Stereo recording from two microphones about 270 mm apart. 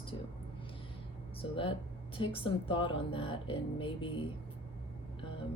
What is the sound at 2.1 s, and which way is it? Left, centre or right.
A woman's voice, centre.